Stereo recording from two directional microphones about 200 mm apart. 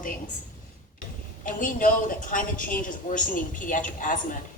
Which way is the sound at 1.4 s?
45° left (ahead or behind).